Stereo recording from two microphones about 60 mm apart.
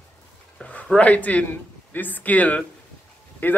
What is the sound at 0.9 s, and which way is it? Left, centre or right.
A man's voice, left.